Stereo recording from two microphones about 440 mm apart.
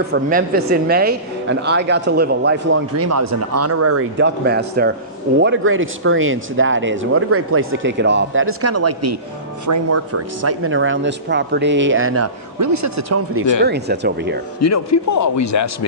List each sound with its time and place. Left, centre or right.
0.1 s a woman's voice: centre
13.7 s a woman's voice: right
14.6 s a man's voice: left